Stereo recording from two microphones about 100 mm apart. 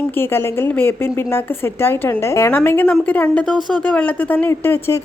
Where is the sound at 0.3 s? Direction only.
20° left (ahead or behind).